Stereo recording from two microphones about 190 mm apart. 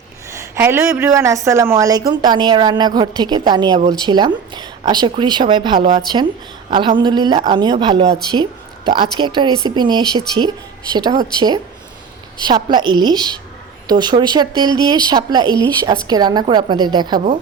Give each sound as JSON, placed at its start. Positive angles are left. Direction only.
{"t": 0.3, "sound": "a woman's voice", "side_deg": -15}
{"t": 8.3, "sound": "a sound", "side_deg": -25}
{"t": 9.0, "sound": "a woman's voice", "side_deg": -25}